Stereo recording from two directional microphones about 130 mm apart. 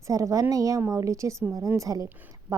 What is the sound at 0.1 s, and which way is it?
A woman's voice, 25° right (ahead or behind).